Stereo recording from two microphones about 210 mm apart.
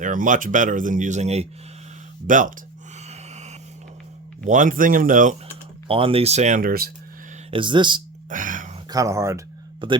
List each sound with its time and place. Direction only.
0.0 s speech: 40° right (ahead or behind)
3.1 s vehicle: 30° right (ahead or behind)
4.4 s speech: 40° right (ahead or behind)
5.9 s speech: 25° right (ahead or behind); by 6.9 s 45° right (ahead or behind)
7.5 s speech: 20° right (ahead or behind)
8.3 s a sound: 40° right (ahead or behind)
8.9 s speech: 15° right (ahead or behind)